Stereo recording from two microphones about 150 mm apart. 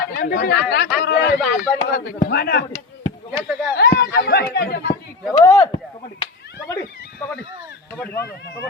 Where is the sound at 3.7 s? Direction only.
90° left.